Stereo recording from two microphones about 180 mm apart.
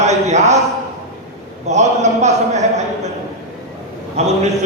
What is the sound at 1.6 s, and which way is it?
A man's voice, 40° right (ahead or behind).